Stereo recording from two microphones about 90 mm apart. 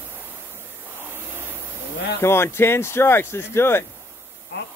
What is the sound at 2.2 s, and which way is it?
Speech, 30° left (ahead or behind).